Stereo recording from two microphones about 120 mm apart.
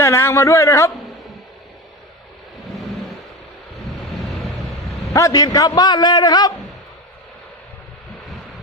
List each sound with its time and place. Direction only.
0.0 s a man's voice: 20° left (ahead or behind)
5.1 s a man's voice: 30° left (ahead or behind)